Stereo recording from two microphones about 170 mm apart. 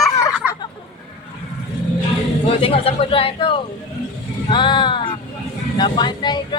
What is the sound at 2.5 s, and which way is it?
Speech, 35° left (ahead or behind).